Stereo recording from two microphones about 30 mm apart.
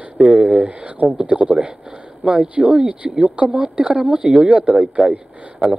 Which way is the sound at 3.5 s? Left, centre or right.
Right.